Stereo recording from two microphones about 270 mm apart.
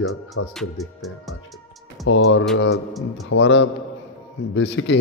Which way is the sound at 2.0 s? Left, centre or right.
Left.